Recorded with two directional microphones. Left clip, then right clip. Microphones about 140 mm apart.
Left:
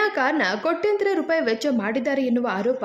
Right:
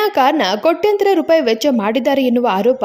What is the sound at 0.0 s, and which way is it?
Speech, 40° right (ahead or behind).